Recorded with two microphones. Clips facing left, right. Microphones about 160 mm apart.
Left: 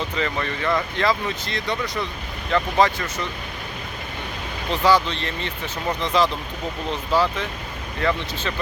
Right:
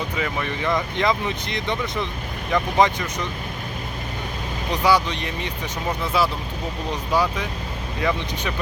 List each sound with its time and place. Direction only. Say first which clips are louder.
0.2 s speech: left 1 dB; 10° right (ahead or behind)
4.7 s speech: left 1 dB; 10° right (ahead or behind)